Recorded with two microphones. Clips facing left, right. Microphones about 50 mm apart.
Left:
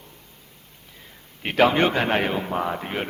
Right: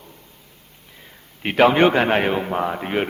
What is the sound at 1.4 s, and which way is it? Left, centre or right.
A man's voice, centre.